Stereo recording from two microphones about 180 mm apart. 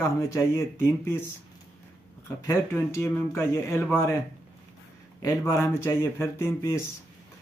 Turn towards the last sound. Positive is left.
turn(degrees=15)  # may be behind; listen again after turning